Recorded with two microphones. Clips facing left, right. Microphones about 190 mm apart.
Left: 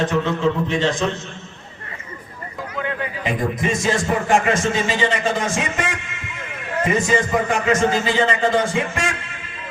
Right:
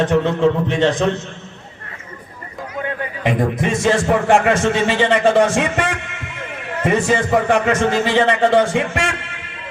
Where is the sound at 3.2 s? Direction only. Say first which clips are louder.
Right 4 dB; 65° right (ahead or behind).